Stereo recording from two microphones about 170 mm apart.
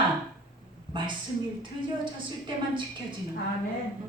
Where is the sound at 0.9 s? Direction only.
30° right (ahead or behind).